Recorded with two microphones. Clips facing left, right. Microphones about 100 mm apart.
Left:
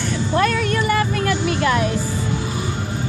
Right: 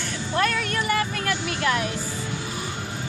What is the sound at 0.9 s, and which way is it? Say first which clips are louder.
Speech: left 5 dB; 25° left (ahead or behind).